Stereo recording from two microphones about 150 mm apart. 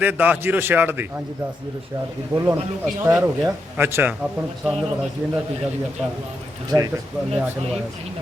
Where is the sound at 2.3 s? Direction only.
20° right (ahead or behind).